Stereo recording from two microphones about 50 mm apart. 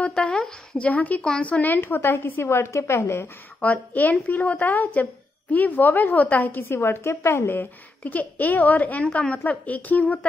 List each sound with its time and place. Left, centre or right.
0.2 s speech: centre
0.7 s a woman's voice: left
3.6 s a woman's voice: left
6.7 s a woman's voice: left
7.5 s a woman's voice: left